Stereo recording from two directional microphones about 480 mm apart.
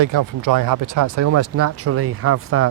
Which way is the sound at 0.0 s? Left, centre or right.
Right.